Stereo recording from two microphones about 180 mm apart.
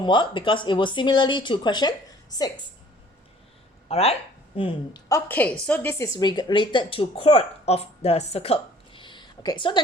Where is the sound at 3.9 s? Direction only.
35° left (ahead or behind).